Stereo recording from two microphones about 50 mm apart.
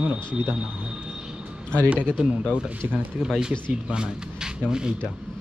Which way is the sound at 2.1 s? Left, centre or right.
Centre.